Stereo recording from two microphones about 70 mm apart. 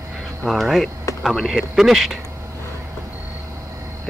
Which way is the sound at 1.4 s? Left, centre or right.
Centre.